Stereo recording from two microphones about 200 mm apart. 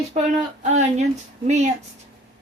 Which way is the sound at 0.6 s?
35° right (ahead or behind).